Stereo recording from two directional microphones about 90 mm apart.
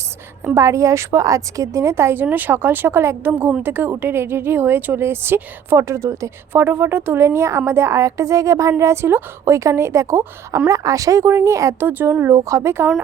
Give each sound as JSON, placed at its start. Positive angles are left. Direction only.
{"t": 0.5, "sound": "a woman's voice", "side_deg": -35}
{"t": 11.9, "sound": "a woman's voice", "side_deg": -20}